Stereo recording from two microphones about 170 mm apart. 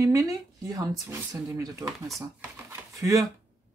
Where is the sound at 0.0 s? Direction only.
20° right (ahead or behind).